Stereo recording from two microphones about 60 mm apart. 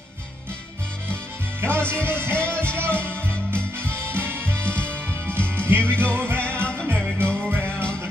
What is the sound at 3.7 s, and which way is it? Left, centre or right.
Music, right.